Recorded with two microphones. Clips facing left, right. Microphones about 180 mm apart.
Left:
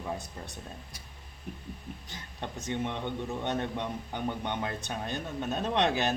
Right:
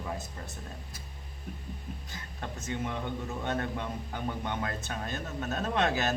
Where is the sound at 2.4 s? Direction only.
25° left (ahead or behind).